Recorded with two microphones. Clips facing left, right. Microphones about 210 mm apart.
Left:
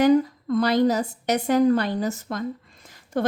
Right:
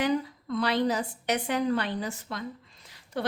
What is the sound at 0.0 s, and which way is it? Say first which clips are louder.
A woman's voice: left 9 dB; 45° left (ahead or behind).